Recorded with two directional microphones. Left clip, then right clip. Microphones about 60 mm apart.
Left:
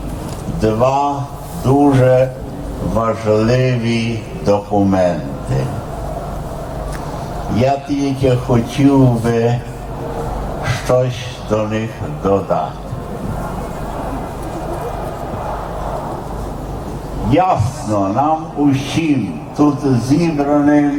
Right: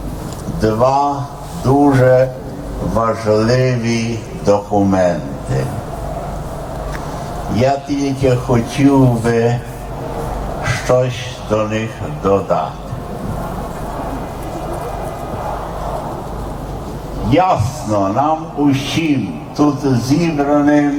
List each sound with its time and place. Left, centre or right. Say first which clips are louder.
0.6 s a man's voice: right 1 dB; centre; by 5.6 s right
7.5 s a man's voice: even; right
10.6 s speech: right 1 dB; right
17.2 s a man's voice: right 1 dB; right